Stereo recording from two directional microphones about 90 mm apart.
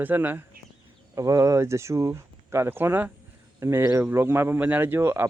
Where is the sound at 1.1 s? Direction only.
40° right (ahead or behind).